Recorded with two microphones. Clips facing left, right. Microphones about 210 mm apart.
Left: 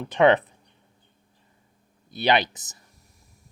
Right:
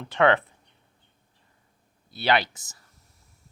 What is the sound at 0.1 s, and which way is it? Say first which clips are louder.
Speech: left 3 dB; 20° left (ahead or behind).